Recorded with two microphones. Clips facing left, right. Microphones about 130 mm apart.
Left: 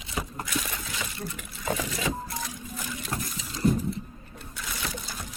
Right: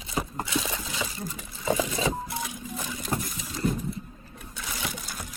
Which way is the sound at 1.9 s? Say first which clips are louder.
Right 3 dB; 25° right (ahead or behind).